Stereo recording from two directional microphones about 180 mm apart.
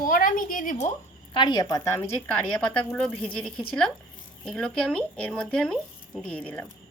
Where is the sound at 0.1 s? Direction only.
50° left (ahead or behind).